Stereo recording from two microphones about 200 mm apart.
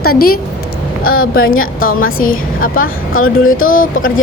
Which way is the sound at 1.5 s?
90° left.